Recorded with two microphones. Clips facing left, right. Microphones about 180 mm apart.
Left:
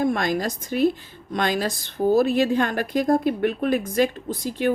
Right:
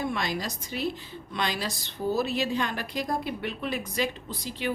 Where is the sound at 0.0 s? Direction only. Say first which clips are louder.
Left 8 dB; 50° left (ahead or behind).